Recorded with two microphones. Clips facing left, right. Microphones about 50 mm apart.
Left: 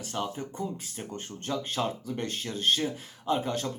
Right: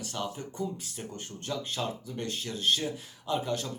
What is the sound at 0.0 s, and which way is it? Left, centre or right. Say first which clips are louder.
Speech: left 2 dB; left.